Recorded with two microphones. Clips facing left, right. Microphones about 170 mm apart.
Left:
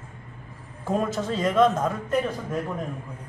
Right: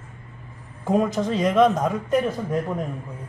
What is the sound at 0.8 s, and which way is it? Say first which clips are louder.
A woman's voice: right 4 dB; 15° right (ahead or behind).